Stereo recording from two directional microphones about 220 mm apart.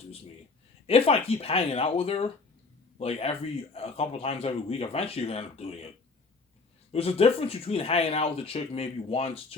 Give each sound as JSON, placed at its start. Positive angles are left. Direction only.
{"t": 0.9, "sound": "a man's voice", "side_deg": 25}
{"t": 6.9, "sound": "a man's voice", "side_deg": 25}